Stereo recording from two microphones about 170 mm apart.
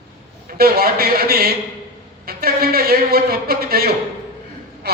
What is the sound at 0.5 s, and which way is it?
A man's voice, 60° right (ahead or behind).